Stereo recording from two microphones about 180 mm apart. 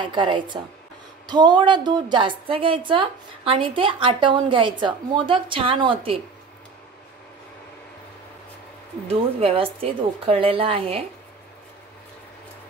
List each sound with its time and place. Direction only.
0.0 s a woman's voice: 25° right (ahead or behind)
9.0 s a woman's voice: 30° right (ahead or behind)